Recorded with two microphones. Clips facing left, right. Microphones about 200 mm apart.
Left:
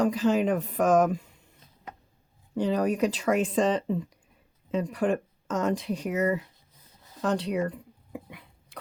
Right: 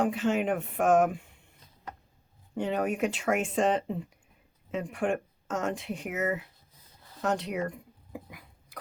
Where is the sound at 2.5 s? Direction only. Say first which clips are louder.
Left 4 dB; 35° left (ahead or behind).